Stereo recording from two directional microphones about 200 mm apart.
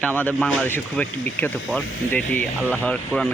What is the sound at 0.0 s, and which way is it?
Speech, 5° left (ahead or behind).